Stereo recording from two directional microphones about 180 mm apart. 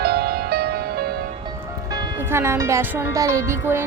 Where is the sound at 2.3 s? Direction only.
15° right (ahead or behind).